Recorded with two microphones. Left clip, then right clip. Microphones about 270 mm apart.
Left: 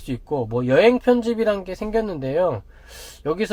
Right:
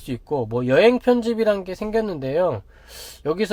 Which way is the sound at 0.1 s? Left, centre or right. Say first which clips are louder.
Even; right.